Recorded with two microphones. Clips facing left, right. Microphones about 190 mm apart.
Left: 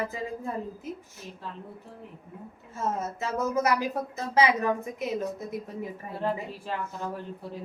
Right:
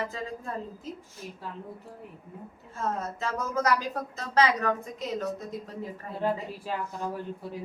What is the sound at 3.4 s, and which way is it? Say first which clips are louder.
A woman's voice: left 2 dB; 15° left (ahead or behind).